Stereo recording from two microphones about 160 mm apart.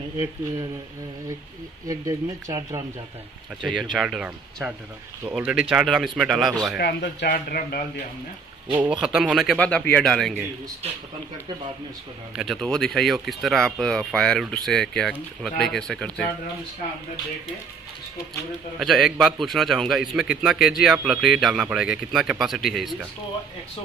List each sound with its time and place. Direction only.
1.9 s speech: 20° right (ahead or behind)
3.9 s speech: centre (ahead or behind)
6.8 s speech: 90° left; by 7.8 s 70° left (ahead or behind)
8.7 s speech: 5° right (ahead or behind)
12.4 s speech: centre (ahead or behind)
18.8 s speech: centre (ahead or behind)